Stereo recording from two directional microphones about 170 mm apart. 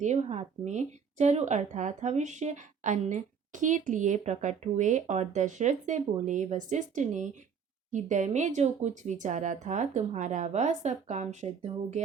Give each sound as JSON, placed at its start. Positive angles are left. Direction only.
{"t": 0.0, "sound": "a woman's voice", "side_deg": -40}